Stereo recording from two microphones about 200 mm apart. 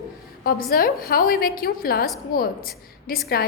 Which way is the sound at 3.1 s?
50° left (ahead or behind).